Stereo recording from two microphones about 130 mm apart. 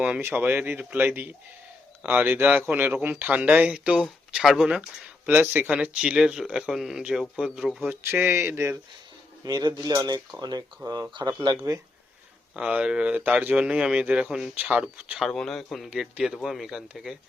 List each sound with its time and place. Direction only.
0.0 s speech: 15° right (ahead or behind)
7.9 s speech: 15° right (ahead or behind)
9.4 s speech: 30° right (ahead or behind)
12.5 s speech: 5° right (ahead or behind)
15.3 s a man's voice: 5° left (ahead or behind)